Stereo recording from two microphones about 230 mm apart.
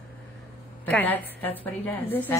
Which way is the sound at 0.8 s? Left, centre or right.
Centre.